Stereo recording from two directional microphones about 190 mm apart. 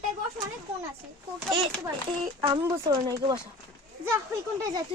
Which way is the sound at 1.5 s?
20° right (ahead or behind).